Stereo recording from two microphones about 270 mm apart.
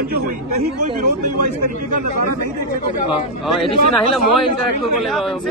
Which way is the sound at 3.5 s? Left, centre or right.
Centre.